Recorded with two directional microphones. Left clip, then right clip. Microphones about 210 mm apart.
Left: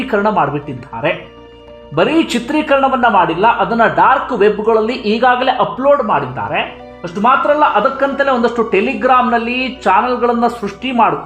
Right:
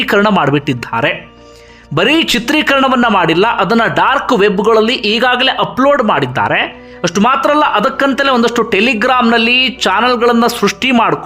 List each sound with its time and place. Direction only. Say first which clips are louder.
0.0 s a man's voice: right 3 dB; 20° right (ahead or behind)